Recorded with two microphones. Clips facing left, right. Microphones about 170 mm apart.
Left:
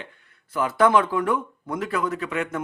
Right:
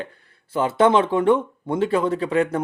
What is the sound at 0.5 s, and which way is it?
Speech, 25° right (ahead or behind).